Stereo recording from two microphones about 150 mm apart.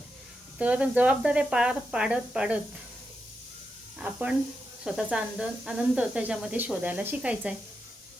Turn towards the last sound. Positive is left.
turn(degrees=-10)  # may be behind; listen again after turning